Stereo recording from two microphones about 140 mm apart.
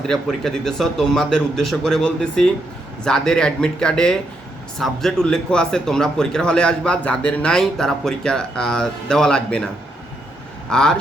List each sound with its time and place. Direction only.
0.1 s a man's voice: centre (ahead or behind)
10.7 s a man's voice: 5° left (ahead or behind)